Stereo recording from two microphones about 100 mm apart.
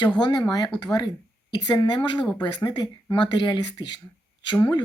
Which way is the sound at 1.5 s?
45° left (ahead or behind).